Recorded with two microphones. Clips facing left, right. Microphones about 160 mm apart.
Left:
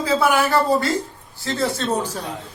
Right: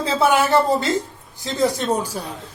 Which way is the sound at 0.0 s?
25° right (ahead or behind).